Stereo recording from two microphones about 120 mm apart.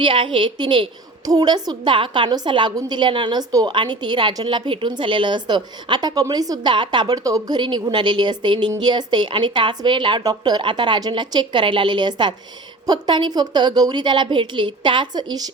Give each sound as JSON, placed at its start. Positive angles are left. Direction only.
{"t": 0.0, "sound": "a woman's voice", "side_deg": -45}